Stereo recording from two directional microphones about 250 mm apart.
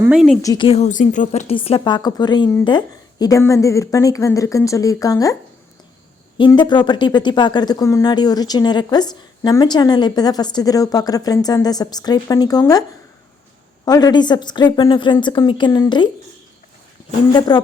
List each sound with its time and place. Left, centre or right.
0.0 s a woman's voice: centre
0.4 s speech: centre
13.8 s speech: centre
17.3 s speech: centre